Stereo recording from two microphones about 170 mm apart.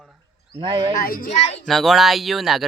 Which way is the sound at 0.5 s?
30° right (ahead or behind).